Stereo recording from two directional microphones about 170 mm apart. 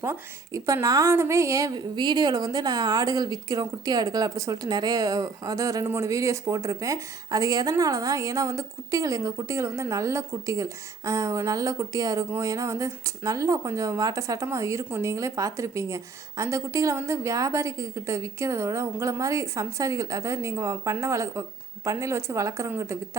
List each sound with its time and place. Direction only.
0.0 s a woman's voice: 20° right (ahead or behind)